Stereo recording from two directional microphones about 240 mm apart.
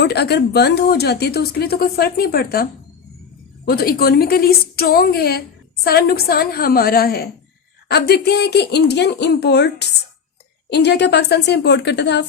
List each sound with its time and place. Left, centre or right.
0.0 s a woman's voice: left
3.7 s a woman's voice: left